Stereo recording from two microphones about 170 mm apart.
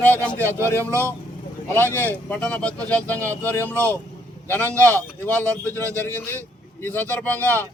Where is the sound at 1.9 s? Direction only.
10° left (ahead or behind).